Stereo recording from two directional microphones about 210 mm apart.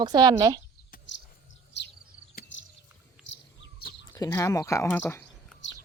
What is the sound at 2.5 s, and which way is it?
Bird, 60° left (ahead or behind).